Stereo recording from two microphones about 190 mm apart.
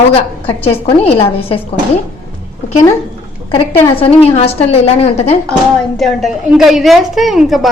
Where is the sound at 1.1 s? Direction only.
30° left (ahead or behind).